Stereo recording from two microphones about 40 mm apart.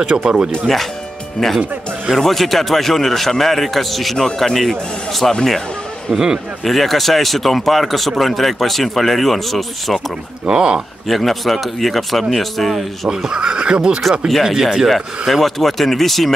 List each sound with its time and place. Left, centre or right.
0.0 s speech: right
1.4 s speech: centre
6.1 s speech: right
6.6 s speech: centre
10.4 s speech: right
11.1 s speech: centre
13.1 s speech: centre
14.4 s speech: centre